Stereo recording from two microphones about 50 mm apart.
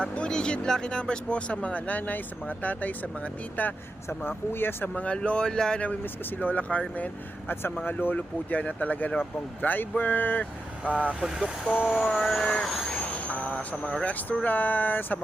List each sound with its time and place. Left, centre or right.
0.0 s speech: centre
3.6 s speech: left
4.2 s speech: left
4.9 s speech: left
6.4 s speech: left
7.4 s speech: left
8.1 s speech: left
11.2 s vehicle: centre
12.2 s speech: centre
13.0 s vehicle: left
14.0 s speech: left